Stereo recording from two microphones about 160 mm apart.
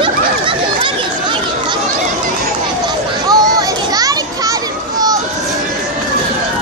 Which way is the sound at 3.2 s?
25° right (ahead or behind).